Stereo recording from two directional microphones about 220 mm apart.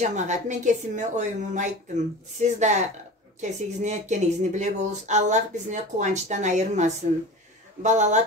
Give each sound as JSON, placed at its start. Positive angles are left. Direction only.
{"t": 0.0, "sound": "speech", "side_deg": -35}